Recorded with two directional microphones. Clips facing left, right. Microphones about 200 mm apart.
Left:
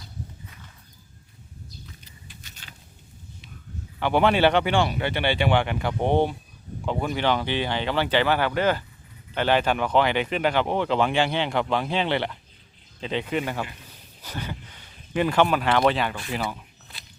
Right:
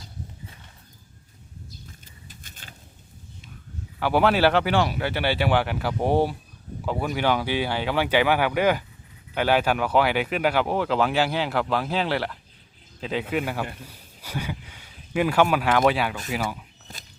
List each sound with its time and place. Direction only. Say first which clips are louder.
2.2 s keys jangling: right 2 dB; 45° right (ahead or behind)
4.0 s speech: even; 5° right (ahead or behind)
16.9 s a sound: right 5 dB; 45° right (ahead or behind)